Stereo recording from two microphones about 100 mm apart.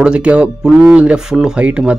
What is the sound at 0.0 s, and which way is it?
Speech, 10° right (ahead or behind).